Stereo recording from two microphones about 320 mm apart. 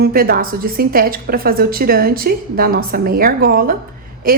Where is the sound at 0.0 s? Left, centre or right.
Right.